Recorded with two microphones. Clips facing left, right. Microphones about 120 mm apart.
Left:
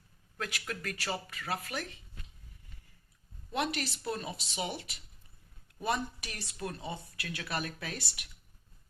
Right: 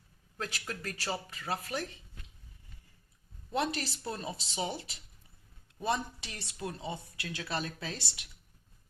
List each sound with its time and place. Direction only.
0.3 s speech: 30° right (ahead or behind)
3.5 s speech: 35° right (ahead or behind)